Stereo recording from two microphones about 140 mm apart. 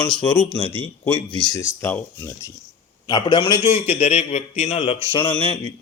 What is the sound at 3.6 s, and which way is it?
Speech, 50° left (ahead or behind).